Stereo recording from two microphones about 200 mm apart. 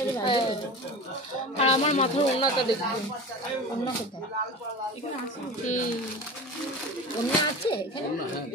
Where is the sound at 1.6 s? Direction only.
30° left (ahead or behind).